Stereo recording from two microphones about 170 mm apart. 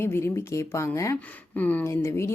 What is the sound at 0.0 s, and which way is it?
Speech, 15° left (ahead or behind).